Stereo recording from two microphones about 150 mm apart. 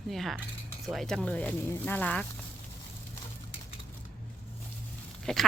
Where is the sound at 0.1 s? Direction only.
Centre (ahead or behind).